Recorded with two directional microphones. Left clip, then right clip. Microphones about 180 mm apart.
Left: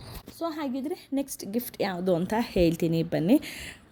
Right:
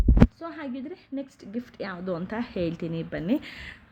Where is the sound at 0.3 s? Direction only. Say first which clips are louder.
Left 4 dB; 15° left (ahead or behind).